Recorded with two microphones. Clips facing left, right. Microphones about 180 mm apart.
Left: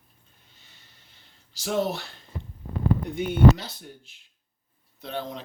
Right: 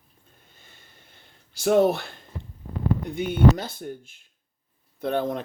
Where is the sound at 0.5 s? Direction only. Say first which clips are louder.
Right 5 dB; 50° right (ahead or behind).